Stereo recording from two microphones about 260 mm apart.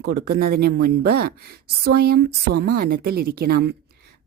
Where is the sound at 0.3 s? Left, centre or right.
Right.